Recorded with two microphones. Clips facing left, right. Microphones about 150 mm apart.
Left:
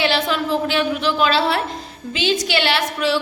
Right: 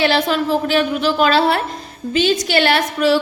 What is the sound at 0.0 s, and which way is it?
A woman's voice, 45° right (ahead or behind).